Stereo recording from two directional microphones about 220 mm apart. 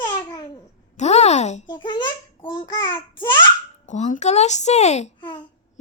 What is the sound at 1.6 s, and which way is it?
A child's voice, 20° left (ahead or behind).